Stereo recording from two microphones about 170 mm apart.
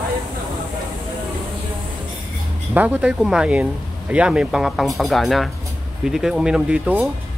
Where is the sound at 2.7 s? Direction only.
10° right (ahead or behind).